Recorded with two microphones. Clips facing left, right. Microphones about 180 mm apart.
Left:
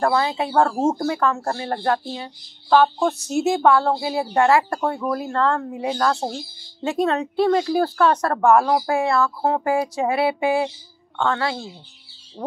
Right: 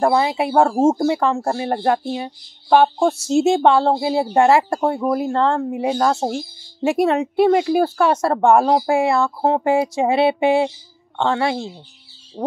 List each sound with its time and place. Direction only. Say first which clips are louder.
0.0 s speech: right 3 dB; 20° right (ahead or behind)
7.1 s a woman's voice: right 3 dB; 10° right (ahead or behind)
8.1 s speech: right 2 dB; 25° right (ahead or behind)